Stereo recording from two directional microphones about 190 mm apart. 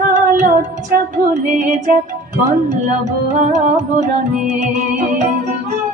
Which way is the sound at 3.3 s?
40° right (ahead or behind).